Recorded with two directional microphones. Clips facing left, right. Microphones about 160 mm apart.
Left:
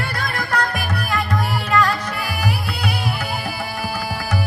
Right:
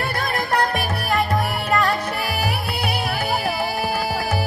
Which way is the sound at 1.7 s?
25° right (ahead or behind).